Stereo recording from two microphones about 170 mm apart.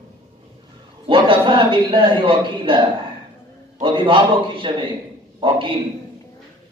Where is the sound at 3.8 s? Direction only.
30° right (ahead or behind).